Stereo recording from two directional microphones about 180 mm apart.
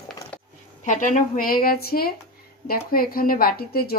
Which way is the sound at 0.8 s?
45° left (ahead or behind).